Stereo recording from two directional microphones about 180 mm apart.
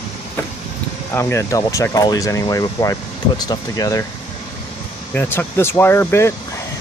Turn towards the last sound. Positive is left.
turn(degrees=15)  # may be behind; listen again after turning